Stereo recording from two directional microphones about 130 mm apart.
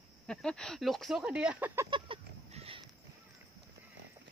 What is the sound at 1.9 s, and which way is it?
Fowl, 45° right (ahead or behind).